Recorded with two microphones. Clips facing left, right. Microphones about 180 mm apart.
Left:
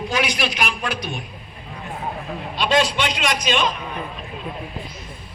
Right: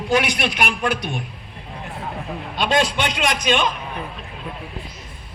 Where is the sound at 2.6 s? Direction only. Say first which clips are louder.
Even; 50° right (ahead or behind).